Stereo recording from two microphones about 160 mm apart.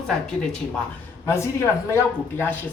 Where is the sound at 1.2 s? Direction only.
15° left (ahead or behind).